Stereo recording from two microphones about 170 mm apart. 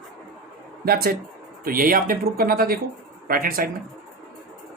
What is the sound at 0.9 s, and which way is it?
Speech, 65° right (ahead or behind).